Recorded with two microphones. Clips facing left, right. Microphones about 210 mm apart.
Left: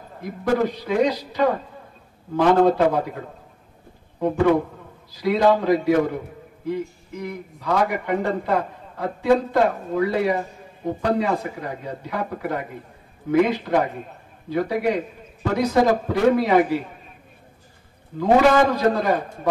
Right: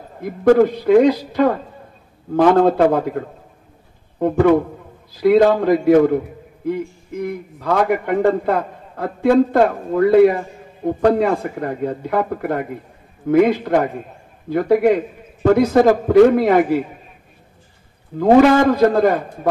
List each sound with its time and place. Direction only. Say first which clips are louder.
0.2 s a man's voice: right 9 dB; 55° right (ahead or behind)
5.1 s a man's voice: right 6 dB; 55° right (ahead or behind)
18.1 s a man's voice: right 5 dB; 55° right (ahead or behind)